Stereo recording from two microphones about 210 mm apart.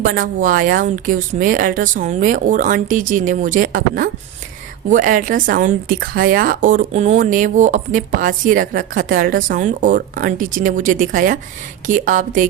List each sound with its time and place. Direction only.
0.0 s speech: 40° right (ahead or behind)